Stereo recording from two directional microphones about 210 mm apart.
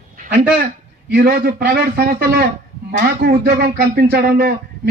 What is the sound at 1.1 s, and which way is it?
A man's voice, 45° right (ahead or behind).